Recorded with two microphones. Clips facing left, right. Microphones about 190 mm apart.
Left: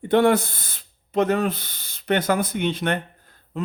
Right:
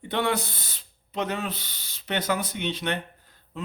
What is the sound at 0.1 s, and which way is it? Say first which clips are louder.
Speech: left 9 dB; 50° left (ahead or behind).